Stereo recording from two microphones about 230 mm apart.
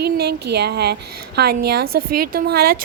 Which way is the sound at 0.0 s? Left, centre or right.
Right.